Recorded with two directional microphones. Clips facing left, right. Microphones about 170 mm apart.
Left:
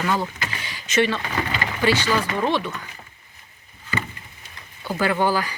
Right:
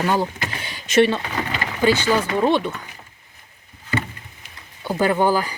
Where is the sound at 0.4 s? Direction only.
30° right (ahead or behind).